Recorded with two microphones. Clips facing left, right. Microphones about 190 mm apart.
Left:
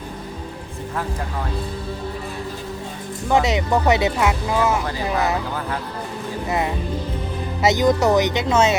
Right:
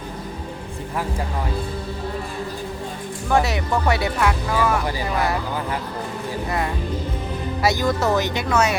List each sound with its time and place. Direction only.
3.2 s speech: 20° left (ahead or behind)
7.6 s speech: 20° left (ahead or behind)